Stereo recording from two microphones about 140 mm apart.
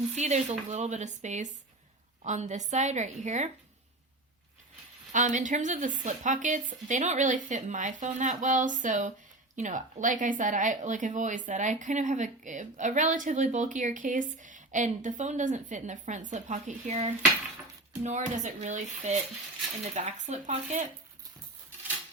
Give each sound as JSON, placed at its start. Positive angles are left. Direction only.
{"t": 0.2, "sound": "speech", "side_deg": -55}
{"t": 5.1, "sound": "speech", "side_deg": -65}